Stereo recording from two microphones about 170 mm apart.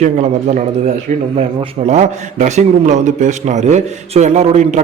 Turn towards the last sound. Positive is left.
turn(degrees=-40)  # may be behind; listen again after turning